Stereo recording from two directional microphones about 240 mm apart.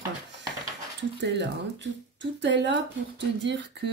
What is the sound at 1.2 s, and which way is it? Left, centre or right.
A woman's voice, right.